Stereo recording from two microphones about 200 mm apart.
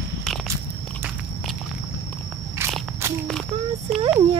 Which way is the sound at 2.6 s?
10° right (ahead or behind).